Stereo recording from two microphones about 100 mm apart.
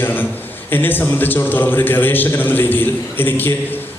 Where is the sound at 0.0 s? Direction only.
20° left (ahead or behind).